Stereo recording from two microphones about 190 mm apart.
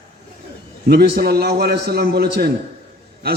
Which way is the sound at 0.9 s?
55° right (ahead or behind).